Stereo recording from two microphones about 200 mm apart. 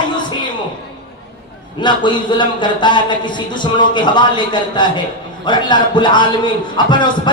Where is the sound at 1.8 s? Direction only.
25° left (ahead or behind).